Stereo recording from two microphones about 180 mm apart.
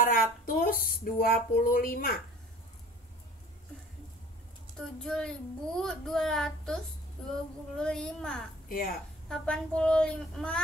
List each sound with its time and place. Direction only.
0.0 s a woman's voice: 50° left (ahead or behind)
4.7 s a woman's voice: 5° left (ahead or behind)
8.6 s a woman's voice: 55° left (ahead or behind)
9.3 s a woman's voice: 5° left (ahead or behind)